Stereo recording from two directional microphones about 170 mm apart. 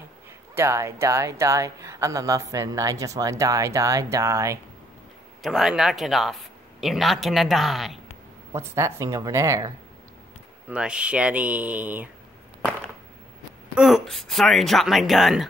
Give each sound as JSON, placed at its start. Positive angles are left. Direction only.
{"t": 0.6, "sound": "speech", "side_deg": -15}
{"t": 5.4, "sound": "speech", "side_deg": 0}
{"t": 8.5, "sound": "speech", "side_deg": -15}
{"t": 10.7, "sound": "speech", "side_deg": -5}
{"t": 13.7, "sound": "speech", "side_deg": 0}